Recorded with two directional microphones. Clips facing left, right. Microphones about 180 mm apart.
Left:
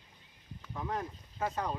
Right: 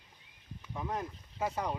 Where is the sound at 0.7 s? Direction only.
5° right (ahead or behind).